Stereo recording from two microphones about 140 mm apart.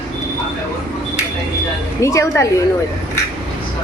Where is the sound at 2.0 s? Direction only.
20° left (ahead or behind).